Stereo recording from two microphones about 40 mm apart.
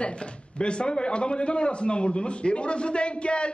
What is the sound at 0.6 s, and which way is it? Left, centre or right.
A man's voice, left.